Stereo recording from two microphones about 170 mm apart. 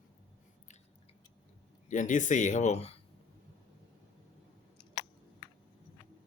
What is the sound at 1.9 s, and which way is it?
Speech, 45° left (ahead or behind).